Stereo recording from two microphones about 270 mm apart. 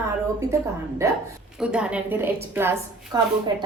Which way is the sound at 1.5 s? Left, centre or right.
Centre.